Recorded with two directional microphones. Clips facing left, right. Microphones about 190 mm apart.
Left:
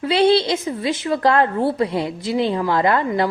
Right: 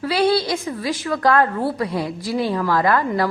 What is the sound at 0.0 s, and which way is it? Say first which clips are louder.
A woman's voice: left 3 dB; 25° left (ahead or behind).